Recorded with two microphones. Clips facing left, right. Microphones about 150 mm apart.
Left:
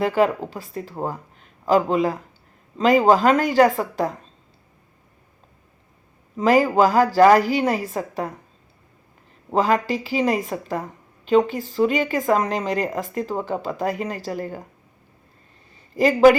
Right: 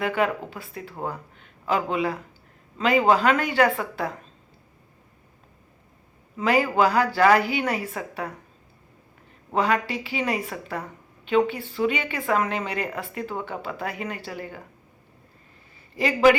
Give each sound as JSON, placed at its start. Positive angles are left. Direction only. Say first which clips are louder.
{"t": 0.0, "sound": "speech", "louder": "left 5 dB", "side_deg": 35}
{"t": 6.3, "sound": "speech", "louder": "left 5 dB", "side_deg": 40}
{"t": 9.5, "sound": "speech", "louder": "left 4 dB", "side_deg": 35}
{"t": 16.0, "sound": "speech", "louder": "left 5 dB", "side_deg": 40}